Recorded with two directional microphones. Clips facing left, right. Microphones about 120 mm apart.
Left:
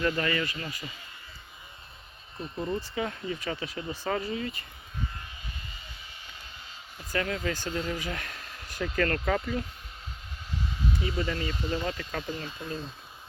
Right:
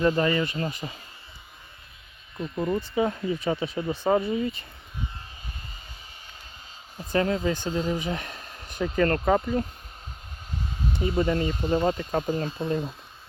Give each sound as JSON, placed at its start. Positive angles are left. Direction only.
{"t": 0.0, "sound": "speech", "side_deg": -25}
{"t": 2.4, "sound": "speech", "side_deg": -35}
{"t": 2.9, "sound": "speech", "side_deg": -25}
{"t": 7.1, "sound": "speech", "side_deg": -30}
{"t": 10.6, "sound": "a sound", "side_deg": -45}
{"t": 11.0, "sound": "speech", "side_deg": -45}